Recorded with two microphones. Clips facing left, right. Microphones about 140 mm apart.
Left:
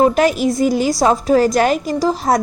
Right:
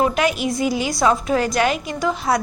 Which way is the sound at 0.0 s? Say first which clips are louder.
Left 6 dB; 40° left (ahead or behind).